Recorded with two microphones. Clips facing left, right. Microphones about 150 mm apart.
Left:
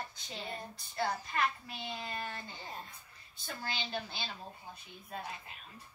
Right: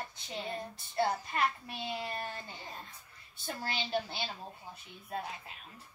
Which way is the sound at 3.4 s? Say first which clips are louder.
Right 3 dB; 25° right (ahead or behind).